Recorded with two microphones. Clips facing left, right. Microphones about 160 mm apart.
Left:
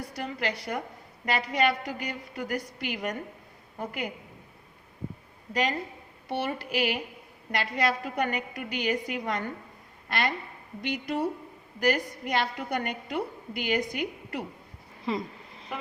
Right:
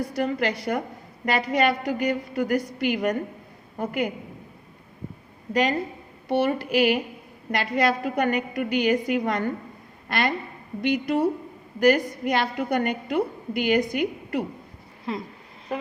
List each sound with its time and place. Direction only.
0.2 s a woman's voice: 50° right (ahead or behind)
6.3 s a woman's voice: 55° right (ahead or behind)
15.1 s speech: centre (ahead or behind)